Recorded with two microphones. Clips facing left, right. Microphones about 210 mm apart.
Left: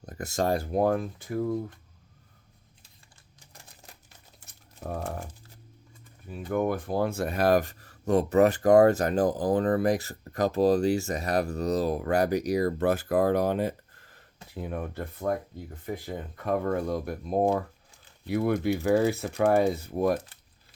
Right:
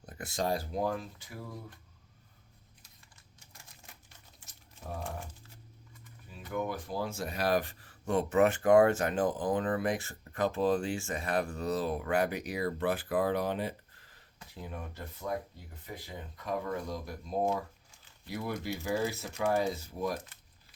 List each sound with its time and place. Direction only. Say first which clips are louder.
0.0 s speech: left 6 dB; 40° left (ahead or behind)
3.4 s crumpling: left 5 dB; 35° left (ahead or behind)
4.4 s crumpling: left 7 dB; 60° left (ahead or behind)
6.5 s speech: left 8 dB; 55° left (ahead or behind)